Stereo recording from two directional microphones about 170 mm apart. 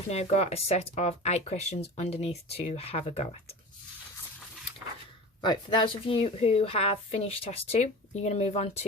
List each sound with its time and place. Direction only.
0.1 s a woman's voice: 40° left (ahead or behind)
5.4 s a woman's voice: 30° left (ahead or behind)